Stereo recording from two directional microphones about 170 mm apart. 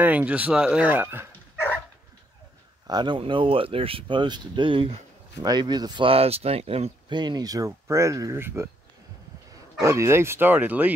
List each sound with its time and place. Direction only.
0.0 s speech: 10° right (ahead or behind)
2.9 s speech: 25° right (ahead or behind)
9.8 s speech: 15° right (ahead or behind)